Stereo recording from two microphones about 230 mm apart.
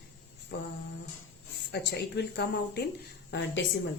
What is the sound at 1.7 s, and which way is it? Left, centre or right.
A woman's voice, left.